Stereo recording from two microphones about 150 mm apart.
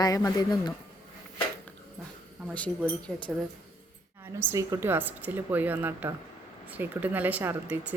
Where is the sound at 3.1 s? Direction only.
Centre (ahead or behind).